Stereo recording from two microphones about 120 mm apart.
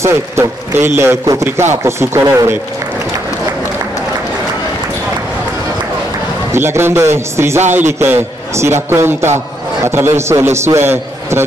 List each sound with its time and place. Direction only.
0.0 s a man's voice: 20° right (ahead or behind)
6.5 s a man's voice: 20° right (ahead or behind)